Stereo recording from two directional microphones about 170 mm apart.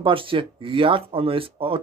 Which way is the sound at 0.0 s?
30° right (ahead or behind).